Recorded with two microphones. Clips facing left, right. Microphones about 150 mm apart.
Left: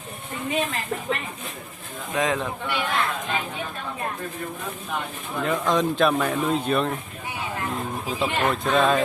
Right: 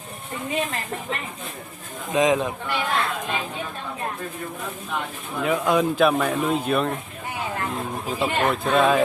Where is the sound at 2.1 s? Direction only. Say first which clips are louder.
Right 5 dB; 20° right (ahead or behind).